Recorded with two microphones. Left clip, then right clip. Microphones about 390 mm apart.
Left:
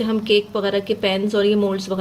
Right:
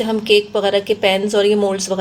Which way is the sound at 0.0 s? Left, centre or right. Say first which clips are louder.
Right 4 dB; centre.